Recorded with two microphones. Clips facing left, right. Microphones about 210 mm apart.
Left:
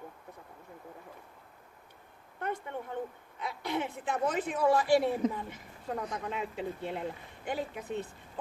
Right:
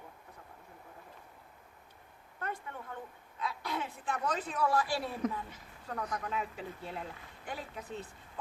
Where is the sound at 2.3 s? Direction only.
25° left (ahead or behind).